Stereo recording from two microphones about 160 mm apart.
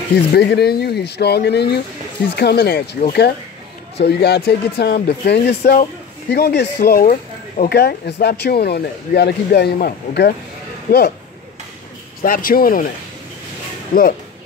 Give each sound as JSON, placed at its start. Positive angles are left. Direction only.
{"t": 0.1, "sound": "speech", "side_deg": 90}
{"t": 4.0, "sound": "speech", "side_deg": 90}
{"t": 12.2, "sound": "speech", "side_deg": 60}
{"t": 13.9, "sound": "speech", "side_deg": 65}